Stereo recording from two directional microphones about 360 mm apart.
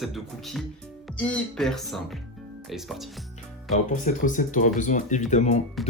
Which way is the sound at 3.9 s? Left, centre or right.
Left.